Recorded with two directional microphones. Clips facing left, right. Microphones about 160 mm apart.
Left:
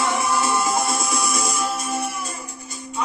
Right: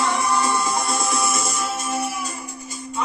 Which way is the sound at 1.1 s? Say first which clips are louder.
Right 1 dB; centre (ahead or behind).